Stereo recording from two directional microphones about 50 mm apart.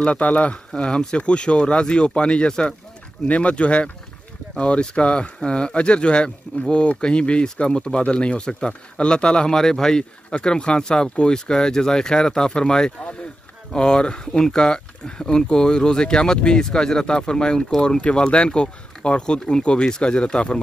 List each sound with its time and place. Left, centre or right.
0.0 s speech: left